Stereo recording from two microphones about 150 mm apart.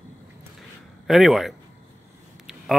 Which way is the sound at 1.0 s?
Centre (ahead or behind).